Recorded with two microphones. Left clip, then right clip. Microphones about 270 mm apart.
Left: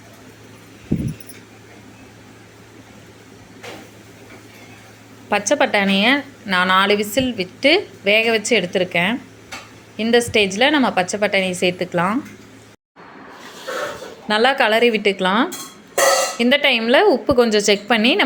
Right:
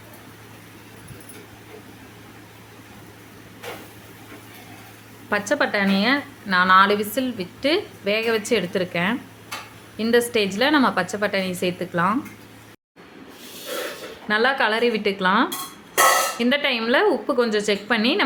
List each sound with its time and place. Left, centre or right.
5.3 s a woman's voice: centre
14.3 s a woman's voice: centre